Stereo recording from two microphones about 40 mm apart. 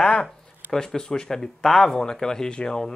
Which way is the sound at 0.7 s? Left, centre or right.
Centre.